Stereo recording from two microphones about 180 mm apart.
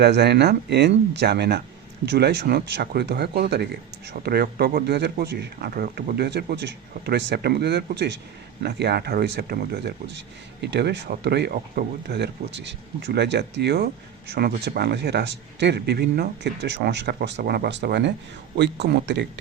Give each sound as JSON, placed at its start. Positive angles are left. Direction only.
{"t": 0.0, "sound": "speech", "side_deg": -65}